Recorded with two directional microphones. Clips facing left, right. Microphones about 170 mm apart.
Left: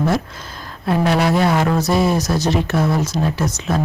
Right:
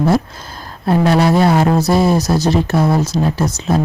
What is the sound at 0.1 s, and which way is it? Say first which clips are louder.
Speech: right 5 dB; 35° right (ahead or behind).